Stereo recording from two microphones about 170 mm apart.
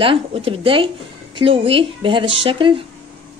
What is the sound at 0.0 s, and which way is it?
Speech, 30° right (ahead or behind).